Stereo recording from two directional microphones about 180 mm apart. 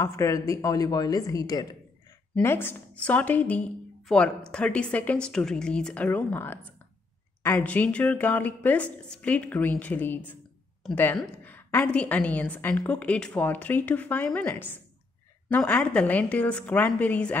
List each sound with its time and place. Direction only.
0.0 s a woman's voice: 15° left (ahead or behind)